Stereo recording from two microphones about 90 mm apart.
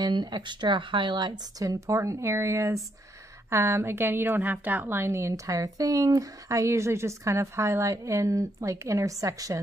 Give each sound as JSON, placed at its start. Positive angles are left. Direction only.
{"t": 0.0, "sound": "a woman's voice", "side_deg": -50}